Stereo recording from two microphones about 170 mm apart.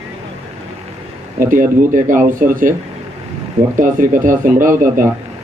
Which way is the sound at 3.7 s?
50° right (ahead or behind).